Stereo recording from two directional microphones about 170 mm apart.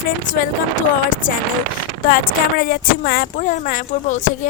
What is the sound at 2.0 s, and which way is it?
Speech, 60° left (ahead or behind).